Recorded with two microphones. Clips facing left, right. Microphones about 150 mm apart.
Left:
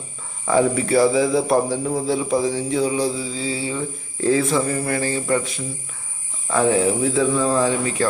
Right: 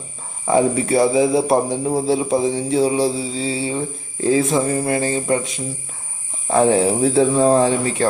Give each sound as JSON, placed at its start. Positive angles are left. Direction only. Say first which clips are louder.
{"t": 0.4, "sound": "a man's voice", "louder": "right 2 dB", "side_deg": -25}
{"t": 6.5, "sound": "speech", "louder": "right 3 dB", "side_deg": -35}